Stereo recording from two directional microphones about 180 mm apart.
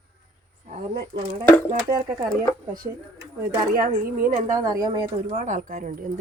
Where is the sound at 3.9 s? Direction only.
45° right (ahead or behind).